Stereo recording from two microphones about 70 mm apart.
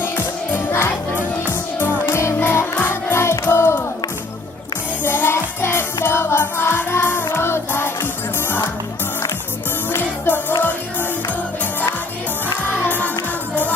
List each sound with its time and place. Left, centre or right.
0.5 s music: left
5.0 s music: left
9.9 s music: left